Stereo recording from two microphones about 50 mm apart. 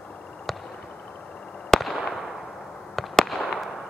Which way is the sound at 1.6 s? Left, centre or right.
Centre.